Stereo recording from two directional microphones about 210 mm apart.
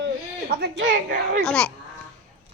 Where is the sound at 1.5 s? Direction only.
5° left (ahead or behind).